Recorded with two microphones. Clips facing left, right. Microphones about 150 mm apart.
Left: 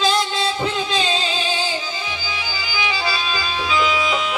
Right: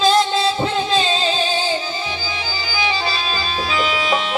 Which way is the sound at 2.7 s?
30° right (ahead or behind).